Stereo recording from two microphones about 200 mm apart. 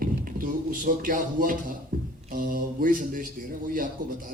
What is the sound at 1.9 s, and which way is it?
Music, 45° right (ahead or behind).